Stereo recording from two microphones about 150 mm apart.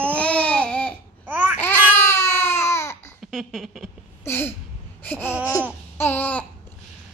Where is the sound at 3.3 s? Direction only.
Centre (ahead or behind).